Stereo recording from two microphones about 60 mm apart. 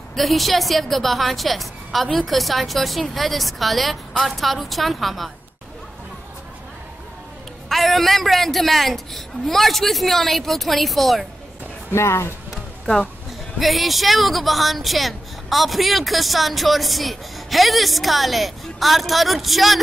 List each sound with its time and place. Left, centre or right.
0.1 s a woman's voice: centre
7.7 s a woman's voice: centre
11.9 s speech: left
13.6 s a woman's voice: centre